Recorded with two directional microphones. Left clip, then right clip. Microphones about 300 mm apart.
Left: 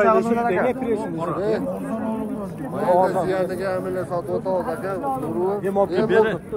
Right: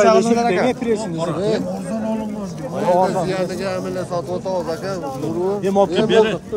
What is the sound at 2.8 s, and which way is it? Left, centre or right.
Speech, right.